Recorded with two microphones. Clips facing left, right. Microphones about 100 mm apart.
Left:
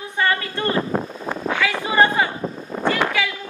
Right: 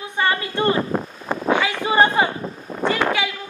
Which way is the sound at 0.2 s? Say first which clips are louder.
Right 1 dB; 20° right (ahead or behind).